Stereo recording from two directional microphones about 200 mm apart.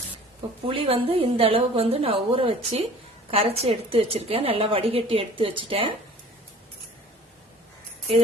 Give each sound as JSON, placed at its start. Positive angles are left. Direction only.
{"t": 0.7, "sound": "a woman's voice", "side_deg": -25}